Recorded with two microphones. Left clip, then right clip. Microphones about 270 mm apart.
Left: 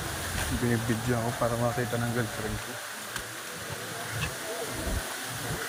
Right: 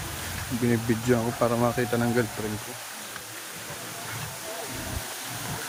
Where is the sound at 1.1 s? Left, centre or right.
Right.